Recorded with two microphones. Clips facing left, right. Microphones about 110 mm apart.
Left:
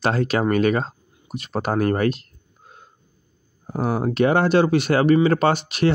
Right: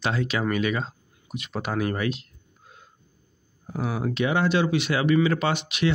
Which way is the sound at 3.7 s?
45° left (ahead or behind).